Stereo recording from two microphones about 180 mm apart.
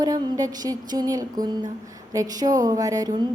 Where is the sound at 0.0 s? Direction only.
20° right (ahead or behind).